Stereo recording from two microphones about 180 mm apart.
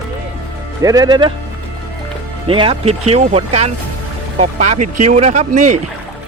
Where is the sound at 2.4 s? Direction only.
30° right (ahead or behind).